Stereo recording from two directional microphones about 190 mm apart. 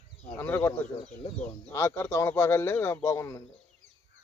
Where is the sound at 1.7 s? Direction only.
15° left (ahead or behind).